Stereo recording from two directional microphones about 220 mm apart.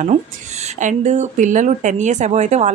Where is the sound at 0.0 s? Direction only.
30° right (ahead or behind).